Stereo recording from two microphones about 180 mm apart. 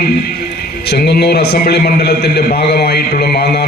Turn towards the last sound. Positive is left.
turn(degrees=60)  # may be behind; listen again after turning